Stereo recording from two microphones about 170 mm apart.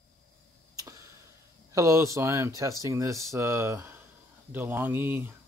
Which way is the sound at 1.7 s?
15° right (ahead or behind).